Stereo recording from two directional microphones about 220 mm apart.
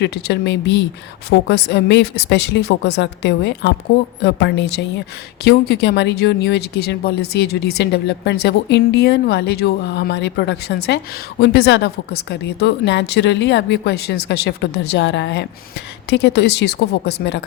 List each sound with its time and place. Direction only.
0.0 s speech: 50° left (ahead or behind)